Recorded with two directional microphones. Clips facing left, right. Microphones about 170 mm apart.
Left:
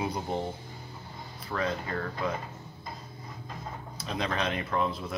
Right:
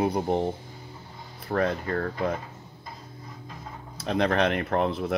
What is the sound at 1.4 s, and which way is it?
Speech, 50° right (ahead or behind).